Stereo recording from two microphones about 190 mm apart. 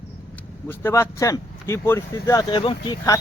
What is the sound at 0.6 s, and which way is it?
Speech, 15° left (ahead or behind).